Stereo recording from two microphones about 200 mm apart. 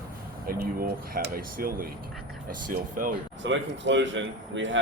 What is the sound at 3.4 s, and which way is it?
Speech, 65° right (ahead or behind).